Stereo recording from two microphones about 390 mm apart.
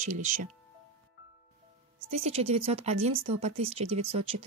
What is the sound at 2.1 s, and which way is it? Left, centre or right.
Speech, centre.